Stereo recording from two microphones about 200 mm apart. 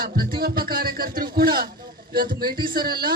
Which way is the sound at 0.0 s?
50° right (ahead or behind).